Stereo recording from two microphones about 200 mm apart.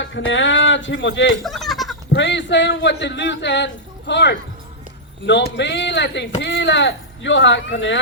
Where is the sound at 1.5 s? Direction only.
Centre (ahead or behind).